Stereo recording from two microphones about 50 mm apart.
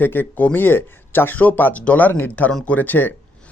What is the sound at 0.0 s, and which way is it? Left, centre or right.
Speech, left.